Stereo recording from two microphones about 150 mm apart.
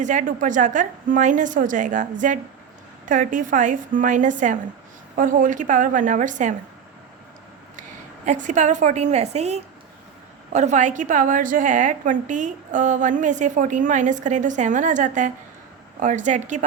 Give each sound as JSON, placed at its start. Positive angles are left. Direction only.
{"t": 0.0, "sound": "a woman's voice", "side_deg": -55}
{"t": 7.8, "sound": "a woman's voice", "side_deg": -55}